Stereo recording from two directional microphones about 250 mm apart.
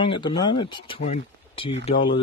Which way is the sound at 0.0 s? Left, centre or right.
Centre.